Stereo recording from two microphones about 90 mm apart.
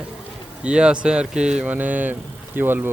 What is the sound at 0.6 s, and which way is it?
Speech, 10° right (ahead or behind).